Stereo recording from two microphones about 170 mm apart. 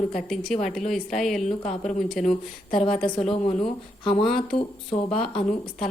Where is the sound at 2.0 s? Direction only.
5° left (ahead or behind).